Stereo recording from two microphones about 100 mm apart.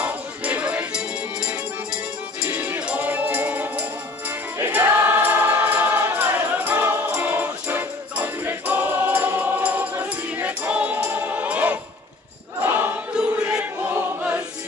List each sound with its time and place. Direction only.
0.0 s music: 15° right (ahead or behind)
4.6 s choir: 25° right (ahead or behind)
7.1 s music: 20° right (ahead or behind)
12.6 s choir: 20° right (ahead or behind)
13.1 s choir: 10° right (ahead or behind)